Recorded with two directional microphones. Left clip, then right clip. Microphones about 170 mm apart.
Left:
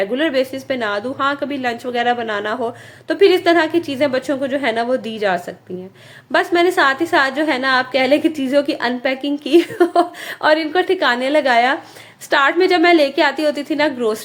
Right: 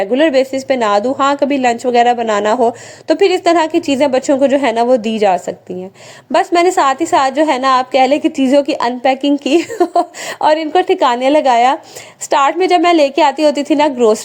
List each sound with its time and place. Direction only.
0.0 s a woman's voice: 35° right (ahead or behind)